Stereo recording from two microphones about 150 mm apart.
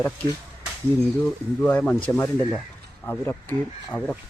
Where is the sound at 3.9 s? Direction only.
20° left (ahead or behind).